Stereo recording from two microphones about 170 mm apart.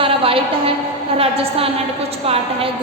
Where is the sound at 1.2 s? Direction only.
35° right (ahead or behind).